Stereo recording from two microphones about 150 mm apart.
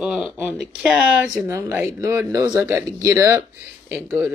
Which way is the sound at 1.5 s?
20° right (ahead or behind).